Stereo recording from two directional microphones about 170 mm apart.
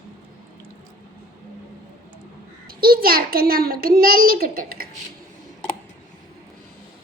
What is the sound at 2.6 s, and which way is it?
A child's voice, 60° right (ahead or behind).